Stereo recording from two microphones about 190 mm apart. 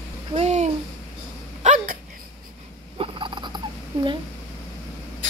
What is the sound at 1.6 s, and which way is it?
Dog, 40° right (ahead or behind).